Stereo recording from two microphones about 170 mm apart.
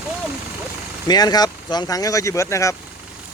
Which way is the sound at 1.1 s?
25° left (ahead or behind).